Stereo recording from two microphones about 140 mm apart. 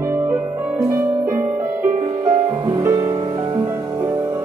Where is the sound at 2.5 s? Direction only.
20° right (ahead or behind).